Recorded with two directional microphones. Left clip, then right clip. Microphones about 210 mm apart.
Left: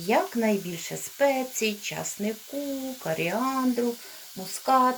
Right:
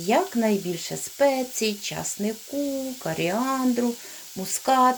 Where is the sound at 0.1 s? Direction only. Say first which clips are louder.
Right 2 dB; 30° right (ahead or behind).